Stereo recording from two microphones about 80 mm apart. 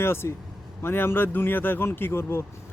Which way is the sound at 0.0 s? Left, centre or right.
Left.